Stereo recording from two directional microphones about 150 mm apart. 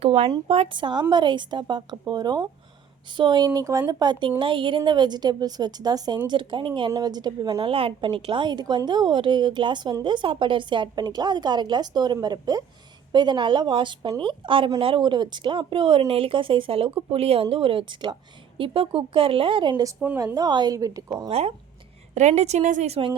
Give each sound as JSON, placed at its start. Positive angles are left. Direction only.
{"t": 0.0, "sound": "a woman's voice", "side_deg": -35}
{"t": 21.2, "sound": "a woman's voice", "side_deg": -45}